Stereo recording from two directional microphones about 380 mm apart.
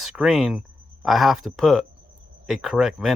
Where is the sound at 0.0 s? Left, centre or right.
Centre.